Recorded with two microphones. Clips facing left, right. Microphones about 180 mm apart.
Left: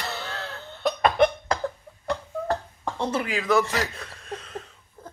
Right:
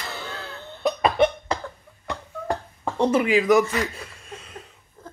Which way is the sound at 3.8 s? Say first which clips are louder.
Right 2 dB; 5° right (ahead or behind).